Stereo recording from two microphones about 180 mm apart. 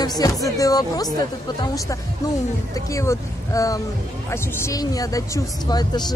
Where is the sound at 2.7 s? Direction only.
15° left (ahead or behind).